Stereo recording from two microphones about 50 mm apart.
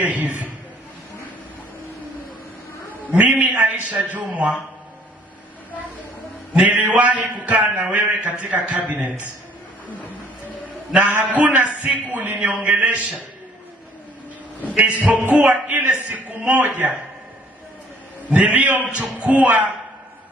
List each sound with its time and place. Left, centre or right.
0.0 s a man's voice: right
3.1 s a man's voice: right
6.5 s a man's voice: right
10.9 s a man's voice: right
14.8 s a man's voice: right
16.6 s a man's voice: right
18.3 s a man's voice: right